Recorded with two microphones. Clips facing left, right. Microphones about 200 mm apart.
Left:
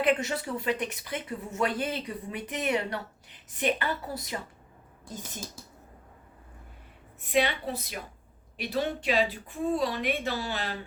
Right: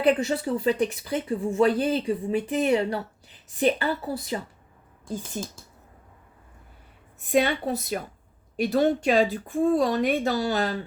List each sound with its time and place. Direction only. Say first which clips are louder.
0.0 s speech: right 5 dB; 35° right (ahead or behind)
7.2 s speech: right 4 dB; 45° right (ahead or behind)